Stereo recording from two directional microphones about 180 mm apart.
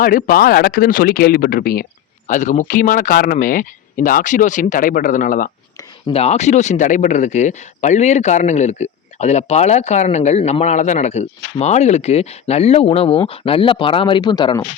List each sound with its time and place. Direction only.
0.0 s speech: 50° left (ahead or behind)
6.1 s speech: 35° left (ahead or behind)